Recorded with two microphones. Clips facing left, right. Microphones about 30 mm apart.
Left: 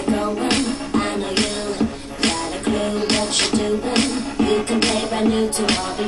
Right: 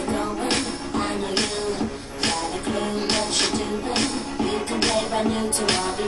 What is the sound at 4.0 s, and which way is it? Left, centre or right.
Music, left.